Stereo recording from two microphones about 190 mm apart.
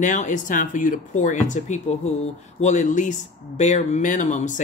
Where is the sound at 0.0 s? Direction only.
40° left (ahead or behind).